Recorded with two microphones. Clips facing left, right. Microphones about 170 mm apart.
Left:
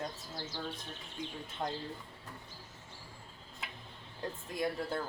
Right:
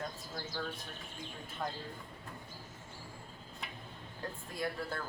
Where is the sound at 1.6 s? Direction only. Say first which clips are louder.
Left 2 dB; 20° left (ahead or behind).